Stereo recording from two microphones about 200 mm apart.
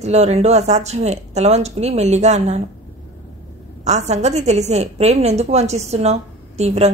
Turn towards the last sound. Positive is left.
turn(degrees=-35)  # may be behind; listen again after turning